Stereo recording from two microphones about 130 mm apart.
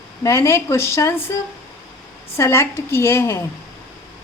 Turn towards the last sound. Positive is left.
turn(degrees=20)  # may be behind; listen again after turning